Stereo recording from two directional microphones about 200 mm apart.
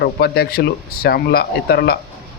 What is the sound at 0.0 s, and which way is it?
Speech, 50° left (ahead or behind).